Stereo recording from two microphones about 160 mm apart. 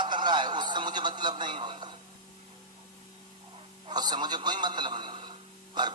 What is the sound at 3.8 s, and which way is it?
A man's voice, 25° right (ahead or behind).